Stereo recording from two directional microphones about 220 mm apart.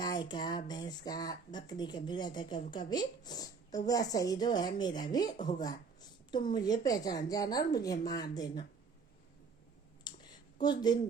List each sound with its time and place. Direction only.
0.0 s speech: 20° left (ahead or behind)
10.1 s a sound: 20° left (ahead or behind)
10.6 s speech: 20° left (ahead or behind)